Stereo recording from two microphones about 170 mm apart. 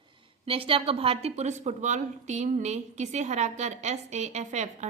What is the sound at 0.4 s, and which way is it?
A woman's voice, 35° right (ahead or behind).